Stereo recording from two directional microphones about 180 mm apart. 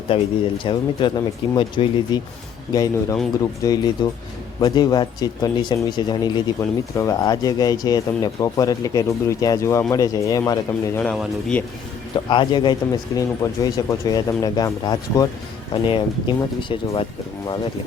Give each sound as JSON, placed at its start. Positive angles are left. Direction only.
{"t": 0.1, "sound": "speech", "side_deg": 30}
{"t": 11.0, "sound": "a man's voice", "side_deg": 5}
{"t": 12.3, "sound": "speech", "side_deg": 25}